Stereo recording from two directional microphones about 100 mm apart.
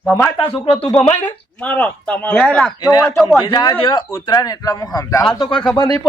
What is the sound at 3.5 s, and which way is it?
A man's voice, 45° left (ahead or behind).